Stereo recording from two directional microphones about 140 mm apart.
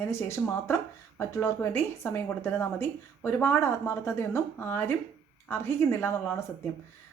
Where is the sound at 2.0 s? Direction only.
15° left (ahead or behind).